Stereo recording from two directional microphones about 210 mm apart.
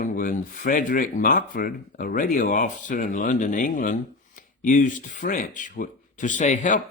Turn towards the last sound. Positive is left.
turn(degrees=35)  # may be behind; listen again after turning